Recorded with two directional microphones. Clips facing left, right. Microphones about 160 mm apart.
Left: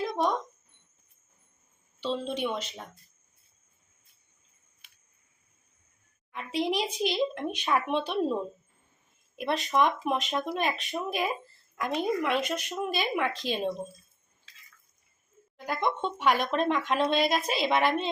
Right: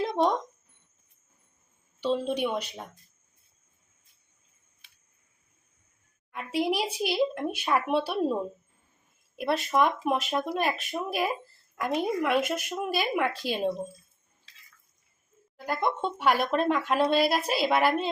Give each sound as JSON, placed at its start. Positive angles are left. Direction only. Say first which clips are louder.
{"t": 0.1, "sound": "a sound", "louder": "right 3 dB", "side_deg": -20}
{"t": 2.0, "sound": "speech", "louder": "right 4 dB", "side_deg": -10}
{"t": 6.3, "sound": "speech", "louder": "right 1 dB", "side_deg": -10}
{"t": 15.5, "sound": "speech", "louder": "right 1 dB", "side_deg": -10}